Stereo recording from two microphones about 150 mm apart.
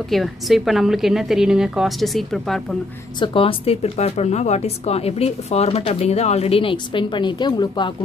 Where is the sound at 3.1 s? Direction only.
35° left (ahead or behind).